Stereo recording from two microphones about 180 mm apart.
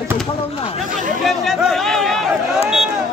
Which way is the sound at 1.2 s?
Centre (ahead or behind).